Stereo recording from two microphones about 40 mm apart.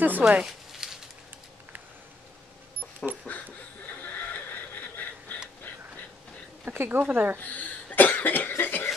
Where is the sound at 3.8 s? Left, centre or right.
Left.